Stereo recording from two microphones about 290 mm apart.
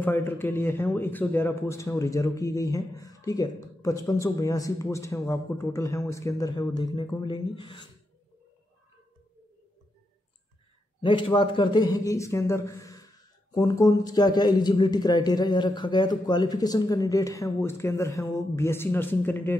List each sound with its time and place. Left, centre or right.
0.0 s a man's voice: centre
11.0 s a man's voice: centre